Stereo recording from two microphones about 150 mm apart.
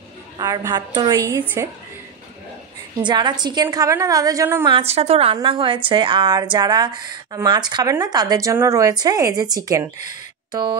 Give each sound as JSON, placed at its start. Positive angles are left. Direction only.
{"t": 0.4, "sound": "speech", "side_deg": -25}
{"t": 1.4, "sound": "a woman's voice", "side_deg": -15}
{"t": 3.0, "sound": "speech", "side_deg": -30}
{"t": 4.6, "sound": "a woman's voice", "side_deg": -40}